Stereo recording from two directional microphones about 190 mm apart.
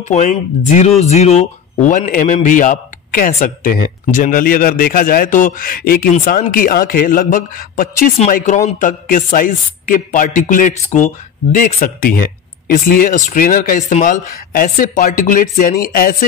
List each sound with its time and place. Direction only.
0.1 s speech: 40° left (ahead or behind)